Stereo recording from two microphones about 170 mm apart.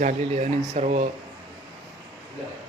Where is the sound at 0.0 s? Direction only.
45° right (ahead or behind).